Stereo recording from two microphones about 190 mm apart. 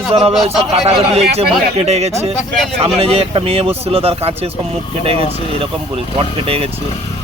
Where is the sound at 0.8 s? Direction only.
35° right (ahead or behind).